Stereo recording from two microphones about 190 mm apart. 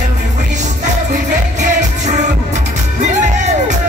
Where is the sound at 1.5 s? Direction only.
40° right (ahead or behind).